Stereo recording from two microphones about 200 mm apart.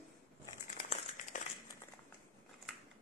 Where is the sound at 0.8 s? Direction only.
35° left (ahead or behind).